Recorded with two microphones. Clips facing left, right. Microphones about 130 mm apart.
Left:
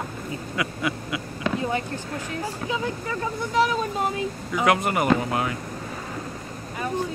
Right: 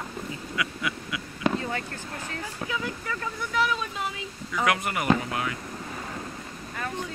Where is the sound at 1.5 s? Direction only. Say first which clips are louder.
Left 5 dB; 20° left (ahead or behind).